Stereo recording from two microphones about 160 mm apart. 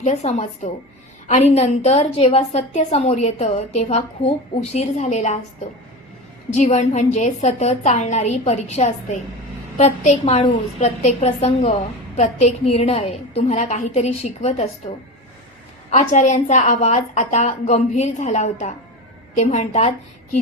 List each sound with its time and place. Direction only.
0.0 s a woman's voice: 45° left (ahead or behind)
6.5 s a woman's voice: 45° left (ahead or behind)
15.9 s a woman's voice: 50° left (ahead or behind)